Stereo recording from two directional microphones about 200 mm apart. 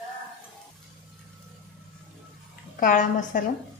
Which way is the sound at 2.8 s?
40° left (ahead or behind).